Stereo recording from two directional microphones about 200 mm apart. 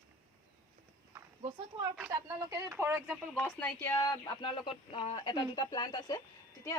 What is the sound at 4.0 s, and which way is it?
Speech, 20° left (ahead or behind).